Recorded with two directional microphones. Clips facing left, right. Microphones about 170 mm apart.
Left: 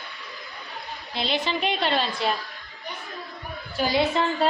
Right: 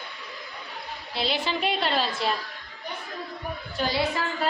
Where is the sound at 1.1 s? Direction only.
5° right (ahead or behind).